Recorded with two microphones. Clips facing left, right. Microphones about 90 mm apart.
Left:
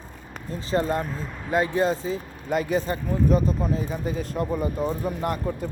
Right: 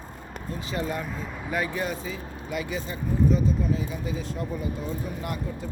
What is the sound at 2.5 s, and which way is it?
Speech, 45° left (ahead or behind).